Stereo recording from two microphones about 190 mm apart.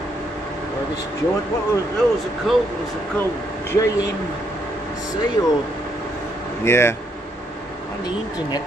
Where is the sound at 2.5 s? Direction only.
Centre (ahead or behind).